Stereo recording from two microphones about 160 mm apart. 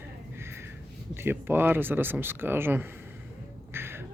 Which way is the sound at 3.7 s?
15° right (ahead or behind).